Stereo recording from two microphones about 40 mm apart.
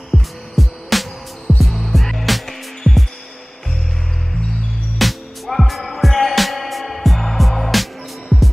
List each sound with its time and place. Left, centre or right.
0.1 s music: right
0.6 s music: centre
4.9 s music: centre